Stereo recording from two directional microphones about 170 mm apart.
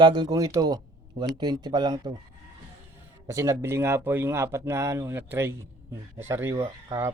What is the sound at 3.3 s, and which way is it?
Speech, 20° right (ahead or behind).